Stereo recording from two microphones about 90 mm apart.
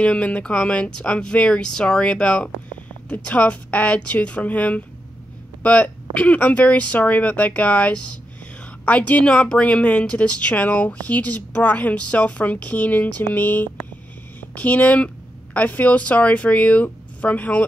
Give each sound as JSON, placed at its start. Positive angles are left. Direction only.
{"t": 0.0, "sound": "speech", "side_deg": 15}